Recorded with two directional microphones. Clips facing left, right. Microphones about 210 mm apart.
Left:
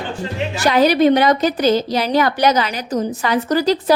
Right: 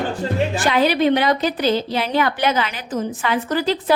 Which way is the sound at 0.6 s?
40° left (ahead or behind).